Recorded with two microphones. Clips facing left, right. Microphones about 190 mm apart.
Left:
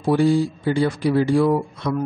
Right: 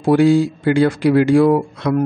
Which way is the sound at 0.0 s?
80° right.